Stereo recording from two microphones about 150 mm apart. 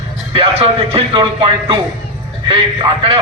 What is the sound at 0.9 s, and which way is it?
Speech, 35° right (ahead or behind).